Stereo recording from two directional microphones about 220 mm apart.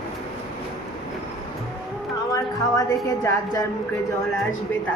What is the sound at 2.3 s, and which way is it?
Speech, 15° left (ahead or behind).